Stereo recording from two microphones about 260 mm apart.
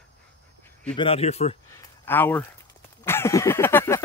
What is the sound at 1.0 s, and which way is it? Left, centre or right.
Speech, left.